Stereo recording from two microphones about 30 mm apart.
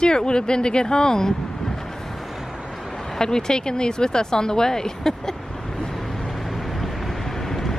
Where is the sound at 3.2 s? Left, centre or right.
Left.